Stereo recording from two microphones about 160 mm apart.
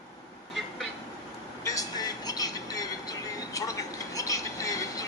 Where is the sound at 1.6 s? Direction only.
25° left (ahead or behind).